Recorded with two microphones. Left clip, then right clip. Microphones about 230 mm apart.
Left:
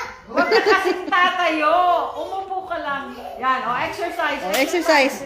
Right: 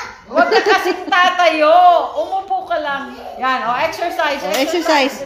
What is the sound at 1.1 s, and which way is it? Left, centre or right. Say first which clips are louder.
A woman's voice: right 6 dB; right.